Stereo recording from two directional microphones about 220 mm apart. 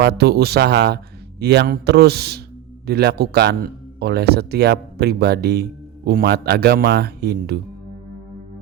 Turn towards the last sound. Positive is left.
turn(degrees=-45)  # may be behind; listen again after turning